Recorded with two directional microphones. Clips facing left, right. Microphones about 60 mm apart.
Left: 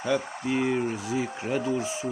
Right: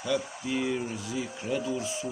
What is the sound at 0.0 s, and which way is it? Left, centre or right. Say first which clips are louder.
Speech: left 3 dB; left.